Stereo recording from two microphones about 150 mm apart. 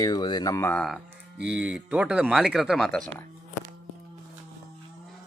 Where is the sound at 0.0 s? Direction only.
30° left (ahead or behind).